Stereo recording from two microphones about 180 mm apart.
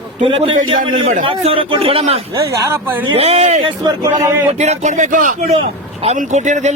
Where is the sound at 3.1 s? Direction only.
35° right (ahead or behind).